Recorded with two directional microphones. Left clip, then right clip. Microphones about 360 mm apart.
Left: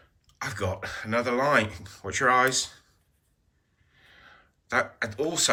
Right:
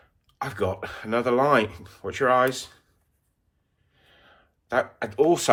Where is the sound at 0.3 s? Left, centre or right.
Centre.